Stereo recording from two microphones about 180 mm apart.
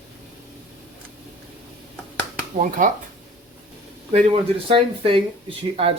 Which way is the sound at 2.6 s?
45° right (ahead or behind).